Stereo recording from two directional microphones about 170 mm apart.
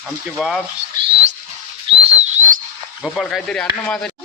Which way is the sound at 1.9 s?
35° right (ahead or behind).